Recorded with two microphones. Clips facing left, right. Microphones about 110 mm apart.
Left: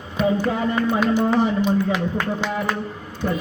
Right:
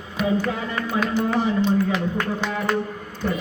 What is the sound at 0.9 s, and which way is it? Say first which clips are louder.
Speech: left 1 dB; 20° left (ahead or behind).